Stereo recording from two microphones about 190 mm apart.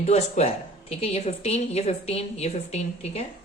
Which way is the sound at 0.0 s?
35° left (ahead or behind).